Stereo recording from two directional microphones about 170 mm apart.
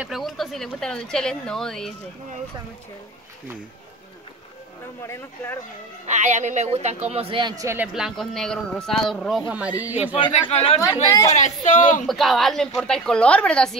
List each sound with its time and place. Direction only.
0.0 s a man's voice: centre (ahead or behind)
5.0 s speech: 15° left (ahead or behind)
6.0 s a man's voice: 45° right (ahead or behind); by 10.1 s 10° right (ahead or behind)
10.1 s speech: 30° left (ahead or behind)
11.1 s a woman's voice: 20° left (ahead or behind)
11.6 s speech: 45° left (ahead or behind)
12.1 s a man's voice: centre (ahead or behind)